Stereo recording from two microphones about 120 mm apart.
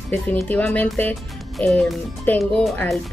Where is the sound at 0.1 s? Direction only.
15° left (ahead or behind).